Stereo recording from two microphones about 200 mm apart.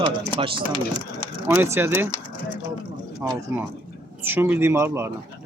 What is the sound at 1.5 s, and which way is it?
Speech, 10° right (ahead or behind).